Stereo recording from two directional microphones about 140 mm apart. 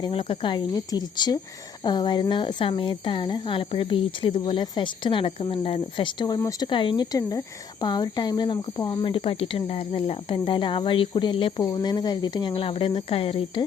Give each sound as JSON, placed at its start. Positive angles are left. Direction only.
{"t": 0.0, "sound": "speech", "side_deg": 40}